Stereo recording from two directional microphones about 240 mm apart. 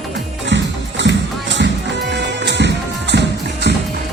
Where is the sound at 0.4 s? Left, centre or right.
Right.